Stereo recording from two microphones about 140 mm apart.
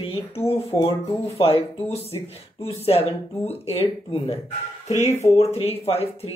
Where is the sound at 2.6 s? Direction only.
45° left (ahead or behind).